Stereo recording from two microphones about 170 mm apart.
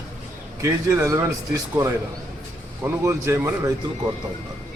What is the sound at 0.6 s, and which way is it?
A man's voice, 15° right (ahead or behind).